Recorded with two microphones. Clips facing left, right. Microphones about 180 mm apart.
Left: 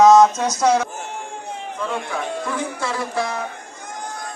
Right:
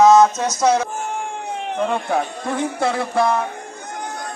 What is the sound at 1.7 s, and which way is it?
Speech, 65° right (ahead or behind).